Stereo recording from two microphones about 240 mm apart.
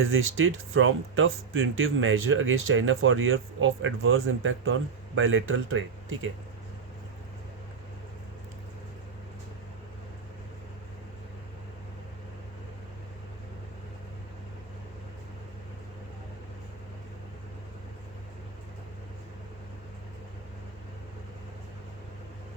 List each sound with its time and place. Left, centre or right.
0.0 s speech: right